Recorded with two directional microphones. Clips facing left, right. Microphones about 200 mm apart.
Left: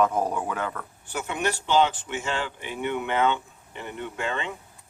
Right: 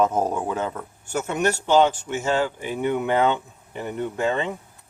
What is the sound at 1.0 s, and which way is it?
Speech, 45° right (ahead or behind).